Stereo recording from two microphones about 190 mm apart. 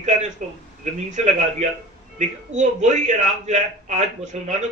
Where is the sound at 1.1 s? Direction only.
40° right (ahead or behind).